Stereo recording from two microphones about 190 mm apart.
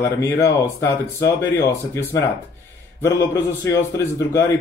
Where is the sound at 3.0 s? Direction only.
15° left (ahead or behind).